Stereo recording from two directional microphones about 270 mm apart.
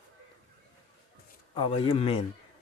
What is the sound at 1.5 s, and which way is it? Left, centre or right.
Speech, centre.